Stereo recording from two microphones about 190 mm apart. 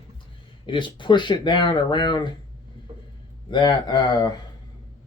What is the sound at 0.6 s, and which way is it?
Speech, 25° left (ahead or behind).